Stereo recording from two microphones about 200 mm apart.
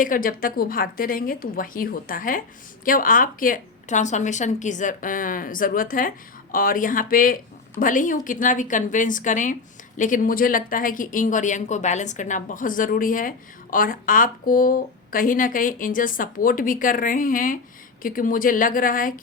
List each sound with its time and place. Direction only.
0.0 s a woman's voice: 45° left (ahead or behind)